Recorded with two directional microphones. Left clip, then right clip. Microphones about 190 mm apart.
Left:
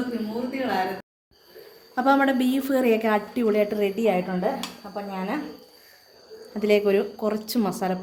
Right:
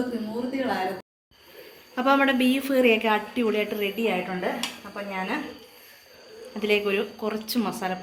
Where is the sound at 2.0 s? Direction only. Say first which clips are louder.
Left 1 dB; 55° left (ahead or behind).